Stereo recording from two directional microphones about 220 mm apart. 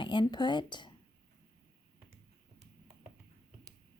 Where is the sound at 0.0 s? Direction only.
20° left (ahead or behind).